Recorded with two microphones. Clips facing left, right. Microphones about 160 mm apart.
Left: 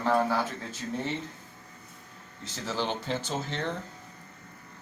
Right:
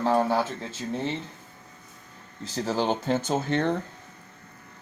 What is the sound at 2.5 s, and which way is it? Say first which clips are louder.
Speech: right 6 dB; 40° right (ahead or behind).